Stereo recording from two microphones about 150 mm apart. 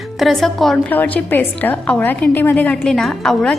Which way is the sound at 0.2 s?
Centre (ahead or behind).